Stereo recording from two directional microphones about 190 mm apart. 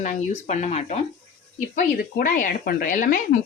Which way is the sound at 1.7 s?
45° left (ahead or behind).